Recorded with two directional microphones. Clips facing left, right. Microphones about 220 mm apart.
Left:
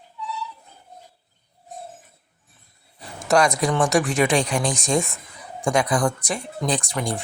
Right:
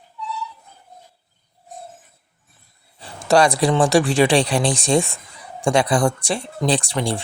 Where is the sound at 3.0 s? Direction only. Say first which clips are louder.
Right 3 dB; 30° right (ahead or behind).